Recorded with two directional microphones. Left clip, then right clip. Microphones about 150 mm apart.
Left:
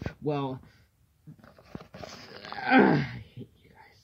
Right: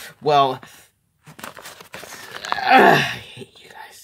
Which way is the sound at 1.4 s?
45° right (ahead or behind).